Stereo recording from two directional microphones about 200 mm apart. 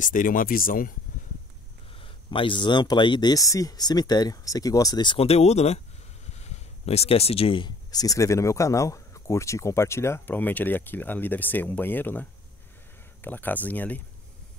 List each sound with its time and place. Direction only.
0.0 s speech: 40° left (ahead or behind)
2.0 s speech: 25° left (ahead or behind); by 14.0 s 10° left (ahead or behind)